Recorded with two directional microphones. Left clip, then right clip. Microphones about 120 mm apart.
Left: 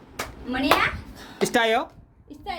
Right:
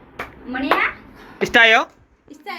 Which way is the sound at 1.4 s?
15° left (ahead or behind).